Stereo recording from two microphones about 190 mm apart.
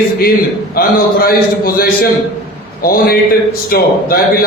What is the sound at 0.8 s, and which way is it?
A man's voice, 50° left (ahead or behind).